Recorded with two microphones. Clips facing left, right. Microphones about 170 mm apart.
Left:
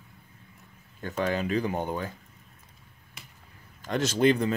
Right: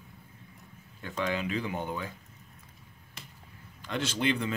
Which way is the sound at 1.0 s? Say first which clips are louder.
Left 4 dB; 45° left (ahead or behind).